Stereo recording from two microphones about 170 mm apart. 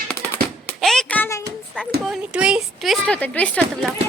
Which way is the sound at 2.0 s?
5° right (ahead or behind).